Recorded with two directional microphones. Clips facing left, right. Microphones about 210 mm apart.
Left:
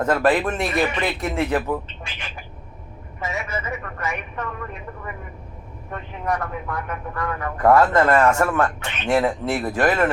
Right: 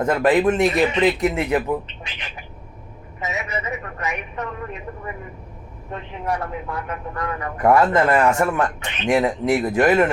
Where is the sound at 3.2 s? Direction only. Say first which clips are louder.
Right 1 dB; 20° right (ahead or behind).